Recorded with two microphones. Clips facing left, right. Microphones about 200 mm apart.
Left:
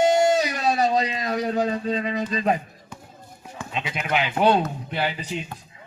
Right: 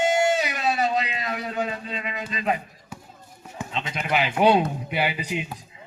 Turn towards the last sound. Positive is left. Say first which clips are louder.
# right 2 dB
turn(degrees=-10)  # may be behind; listen again after turning